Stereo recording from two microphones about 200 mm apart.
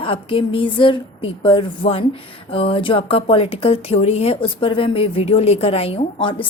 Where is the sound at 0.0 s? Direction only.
25° left (ahead or behind).